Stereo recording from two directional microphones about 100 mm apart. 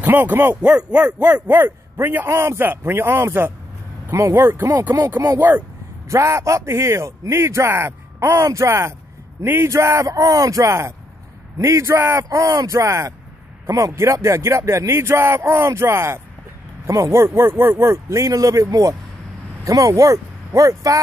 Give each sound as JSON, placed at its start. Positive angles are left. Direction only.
{"t": 0.0, "sound": "speech", "side_deg": -20}
{"t": 6.0, "sound": "speech", "side_deg": -30}